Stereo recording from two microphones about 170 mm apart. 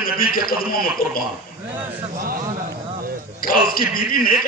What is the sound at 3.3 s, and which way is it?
Speech, 55° left (ahead or behind).